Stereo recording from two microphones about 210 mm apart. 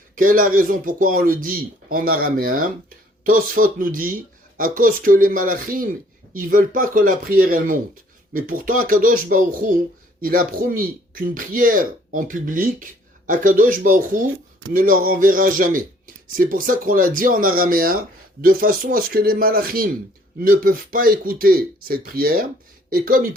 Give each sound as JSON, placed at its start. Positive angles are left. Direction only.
{"t": 0.2, "sound": "speech", "side_deg": -40}